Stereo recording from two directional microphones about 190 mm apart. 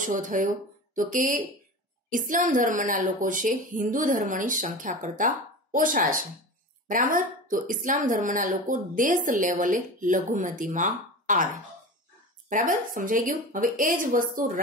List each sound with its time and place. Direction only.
0.0 s speech: 45° right (ahead or behind)
12.4 s speech: 45° right (ahead or behind)